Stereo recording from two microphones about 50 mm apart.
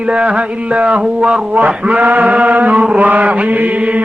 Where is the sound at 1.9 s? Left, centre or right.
Right.